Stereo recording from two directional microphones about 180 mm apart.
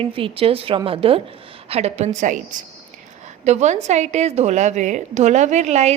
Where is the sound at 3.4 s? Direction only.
40° right (ahead or behind).